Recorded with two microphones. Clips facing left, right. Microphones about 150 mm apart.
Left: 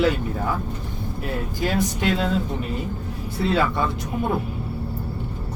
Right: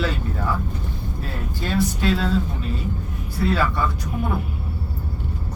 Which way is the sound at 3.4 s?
20° left (ahead or behind).